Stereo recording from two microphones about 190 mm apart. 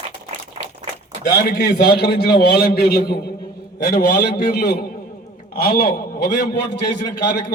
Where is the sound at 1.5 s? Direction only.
60° left (ahead or behind).